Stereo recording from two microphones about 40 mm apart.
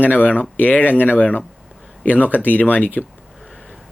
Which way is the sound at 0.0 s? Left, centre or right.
Left.